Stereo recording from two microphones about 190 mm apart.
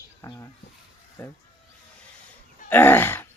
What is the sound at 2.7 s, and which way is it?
Speech, 10° left (ahead or behind).